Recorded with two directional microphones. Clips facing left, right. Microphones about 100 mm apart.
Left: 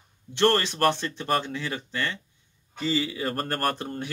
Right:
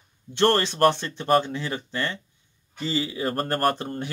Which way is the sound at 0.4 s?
30° right (ahead or behind).